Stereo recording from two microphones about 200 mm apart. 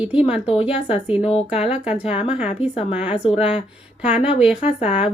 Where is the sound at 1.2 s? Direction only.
30° left (ahead or behind).